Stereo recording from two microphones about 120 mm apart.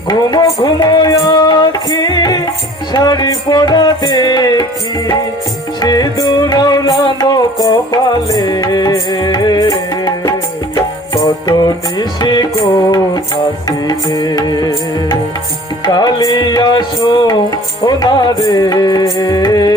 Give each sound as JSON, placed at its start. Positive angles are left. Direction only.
{"t": 0.1, "sound": "music", "side_deg": 35}
{"t": 5.8, "sound": "music", "side_deg": 35}
{"t": 10.8, "sound": "music", "side_deg": 30}
{"t": 13.7, "sound": "music", "side_deg": 30}